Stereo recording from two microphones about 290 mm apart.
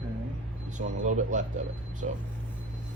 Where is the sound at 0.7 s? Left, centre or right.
Right.